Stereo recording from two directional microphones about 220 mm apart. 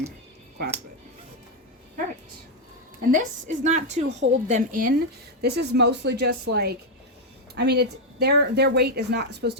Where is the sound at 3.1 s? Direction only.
35° right (ahead or behind).